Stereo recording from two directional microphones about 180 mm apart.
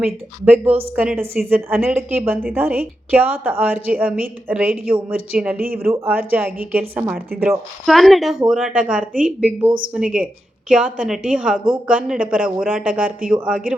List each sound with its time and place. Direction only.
0.0 s a woman's voice: 10° right (ahead or behind)
5.6 s speech: 55° right (ahead or behind)
5.9 s a woman's voice: 10° right (ahead or behind)
7.9 s a woman's voice: centre (ahead or behind)